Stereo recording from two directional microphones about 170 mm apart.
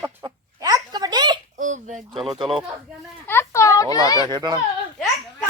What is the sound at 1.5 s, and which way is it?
Fowl, 45° right (ahead or behind).